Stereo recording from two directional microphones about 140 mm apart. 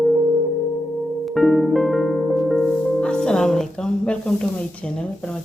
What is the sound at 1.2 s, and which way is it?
Music, centre (ahead or behind).